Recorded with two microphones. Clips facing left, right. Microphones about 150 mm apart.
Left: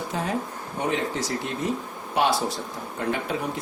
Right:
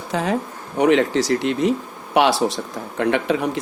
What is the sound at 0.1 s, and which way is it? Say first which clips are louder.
Speech: right 9 dB; 90° right.